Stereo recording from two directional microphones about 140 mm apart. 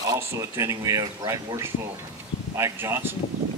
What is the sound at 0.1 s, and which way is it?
Speech, 20° right (ahead or behind).